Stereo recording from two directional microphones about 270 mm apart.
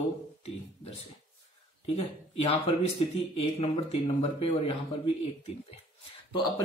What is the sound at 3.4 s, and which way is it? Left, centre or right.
Speech, left.